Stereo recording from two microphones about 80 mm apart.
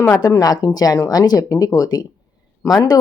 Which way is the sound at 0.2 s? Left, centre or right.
Left.